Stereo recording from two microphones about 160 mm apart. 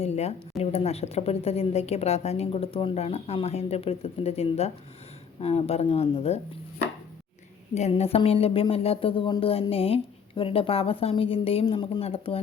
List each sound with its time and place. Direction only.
0.0 s a woman's voice: 40° left (ahead or behind)
7.8 s a woman's voice: 40° left (ahead or behind)